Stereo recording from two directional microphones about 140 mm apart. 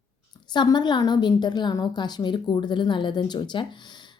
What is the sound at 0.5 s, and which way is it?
A woman's voice, 30° left (ahead or behind).